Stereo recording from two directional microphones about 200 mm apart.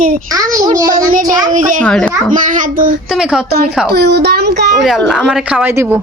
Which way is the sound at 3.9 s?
55° right (ahead or behind).